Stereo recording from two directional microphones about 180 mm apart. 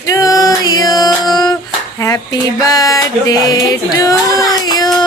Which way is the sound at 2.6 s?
20° left (ahead or behind).